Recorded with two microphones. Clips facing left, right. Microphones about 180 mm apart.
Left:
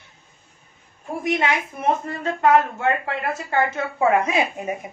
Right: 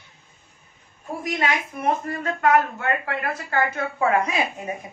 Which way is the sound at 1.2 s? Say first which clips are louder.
Left 3 dB; 25° left (ahead or behind).